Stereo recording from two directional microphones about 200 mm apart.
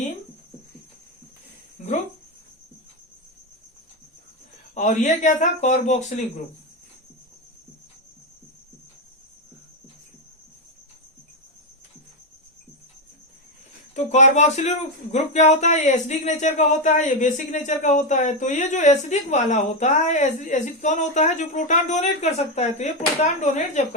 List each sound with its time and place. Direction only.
4.7 s speech: 35° left (ahead or behind)
13.9 s speech: 35° left (ahead or behind)